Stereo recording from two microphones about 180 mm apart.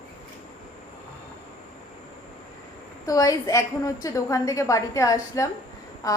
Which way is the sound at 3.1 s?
20° left (ahead or behind).